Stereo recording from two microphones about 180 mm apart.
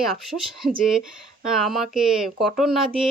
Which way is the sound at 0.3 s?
Centre (ahead or behind).